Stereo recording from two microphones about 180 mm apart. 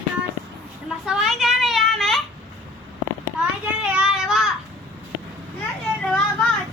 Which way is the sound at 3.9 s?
5° right (ahead or behind).